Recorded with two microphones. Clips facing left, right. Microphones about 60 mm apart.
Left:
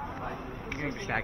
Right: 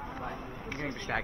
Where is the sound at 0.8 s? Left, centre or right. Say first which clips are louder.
Left 2 dB; left.